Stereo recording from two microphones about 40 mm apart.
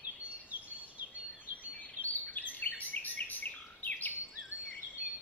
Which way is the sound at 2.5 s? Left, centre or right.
Left.